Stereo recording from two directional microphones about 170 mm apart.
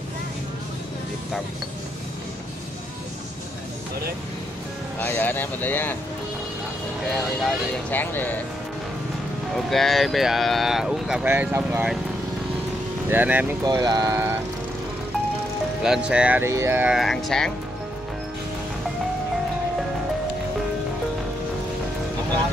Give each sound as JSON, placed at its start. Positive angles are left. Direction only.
{"t": 5.0, "sound": "speech", "side_deg": 10}
{"t": 7.1, "sound": "speech", "side_deg": 10}
{"t": 9.7, "sound": "speech", "side_deg": 0}
{"t": 13.1, "sound": "speech", "side_deg": -10}
{"t": 13.7, "sound": "speech", "side_deg": -25}
{"t": 15.8, "sound": "speech", "side_deg": -5}